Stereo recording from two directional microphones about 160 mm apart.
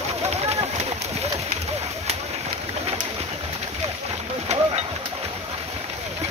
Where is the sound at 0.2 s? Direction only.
40° right (ahead or behind).